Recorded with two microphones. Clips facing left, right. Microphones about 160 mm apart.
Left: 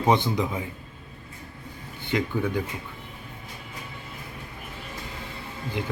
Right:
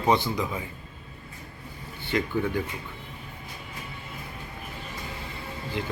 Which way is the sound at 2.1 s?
15° left (ahead or behind).